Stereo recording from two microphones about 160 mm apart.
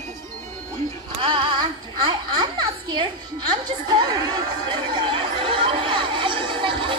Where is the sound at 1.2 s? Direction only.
35° right (ahead or behind).